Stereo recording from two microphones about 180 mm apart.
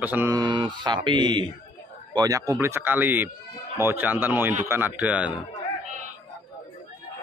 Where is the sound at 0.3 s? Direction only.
25° right (ahead or behind); by 5.4 s 5° right (ahead or behind).